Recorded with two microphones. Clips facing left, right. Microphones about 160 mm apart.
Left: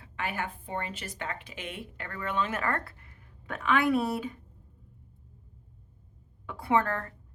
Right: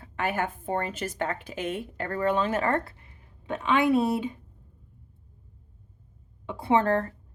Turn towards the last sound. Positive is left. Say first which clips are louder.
# right 4 dB
turn(degrees=-30)  # may be behind; listen again after turning